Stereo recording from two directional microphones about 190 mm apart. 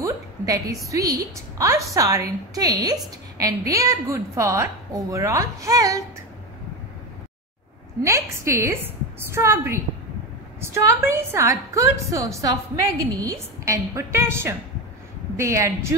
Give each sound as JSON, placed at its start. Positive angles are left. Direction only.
{"t": 0.0, "sound": "a sound", "side_deg": -15}
{"t": 0.8, "sound": "a woman's voice", "side_deg": -15}
{"t": 8.0, "sound": "a woman's voice", "side_deg": -15}